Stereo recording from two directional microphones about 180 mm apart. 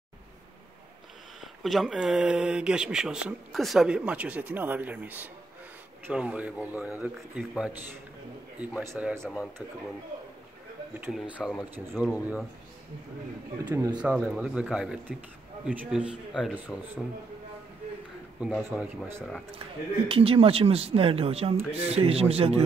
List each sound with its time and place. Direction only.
1.4 s speech: centre (ahead or behind)
11.1 s speech: 5° right (ahead or behind)
13.7 s speech: 20° right (ahead or behind)
13.9 s speech: 5° right (ahead or behind)
18.4 s speech: 5° right (ahead or behind)
20.1 s speech: 30° right (ahead or behind)